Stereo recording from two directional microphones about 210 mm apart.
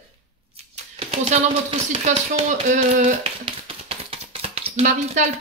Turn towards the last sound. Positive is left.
turn(degrees=-30)  # may be behind; listen again after turning